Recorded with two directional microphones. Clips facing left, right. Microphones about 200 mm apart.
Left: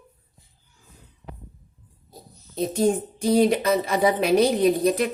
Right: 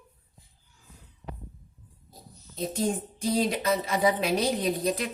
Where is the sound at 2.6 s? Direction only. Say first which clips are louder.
Left 7 dB; 65° left (ahead or behind).